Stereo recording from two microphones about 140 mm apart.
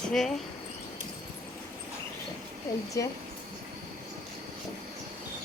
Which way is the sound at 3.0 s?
25° left (ahead or behind).